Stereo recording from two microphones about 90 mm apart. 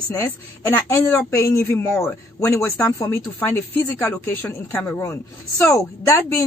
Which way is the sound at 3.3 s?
25° left (ahead or behind).